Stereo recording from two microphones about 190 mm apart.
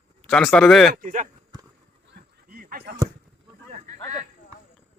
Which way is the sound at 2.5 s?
55° right (ahead or behind).